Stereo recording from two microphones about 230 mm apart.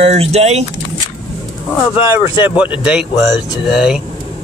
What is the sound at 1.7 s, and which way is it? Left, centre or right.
Speech, centre.